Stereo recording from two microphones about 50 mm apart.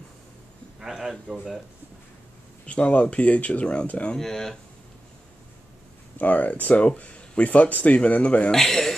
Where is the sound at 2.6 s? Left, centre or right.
Left.